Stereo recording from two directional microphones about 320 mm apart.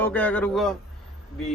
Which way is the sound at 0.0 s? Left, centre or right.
Centre.